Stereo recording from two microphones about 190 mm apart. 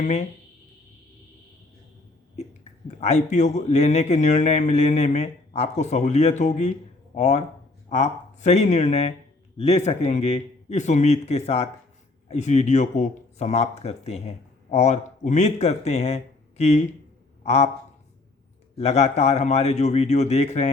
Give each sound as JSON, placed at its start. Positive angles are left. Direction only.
{"t": 0.0, "sound": "speech", "side_deg": 35}
{"t": 2.3, "sound": "a man's voice", "side_deg": 35}
{"t": 18.8, "sound": "speech", "side_deg": 35}